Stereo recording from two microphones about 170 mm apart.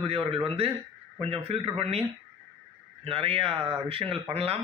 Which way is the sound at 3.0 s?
35° right (ahead or behind).